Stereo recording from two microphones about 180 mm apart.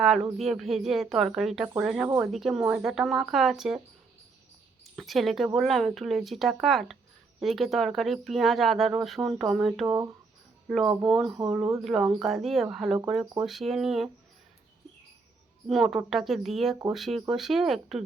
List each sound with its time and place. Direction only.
0.0 s speech: centre (ahead or behind)
4.8 s speech: centre (ahead or behind)
9.8 s speech: 15° right (ahead or behind)
10.7 s speech: centre (ahead or behind)
11.4 s speech: 10° right (ahead or behind)
15.6 s speech: centre (ahead or behind)